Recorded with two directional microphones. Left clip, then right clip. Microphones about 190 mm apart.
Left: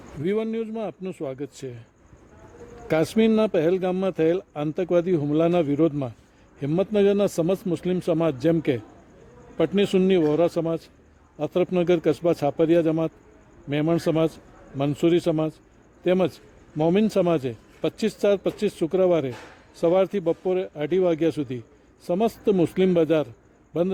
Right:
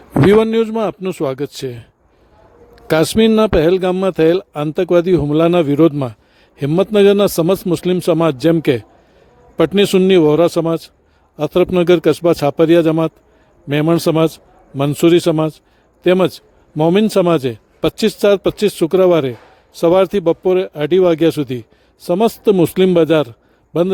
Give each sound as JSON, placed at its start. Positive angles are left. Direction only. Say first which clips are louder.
{"t": 0.3, "sound": "a man's voice", "louder": "right 14 dB", "side_deg": -45}
{"t": 2.8, "sound": "a man's voice", "louder": "right 9 dB", "side_deg": -40}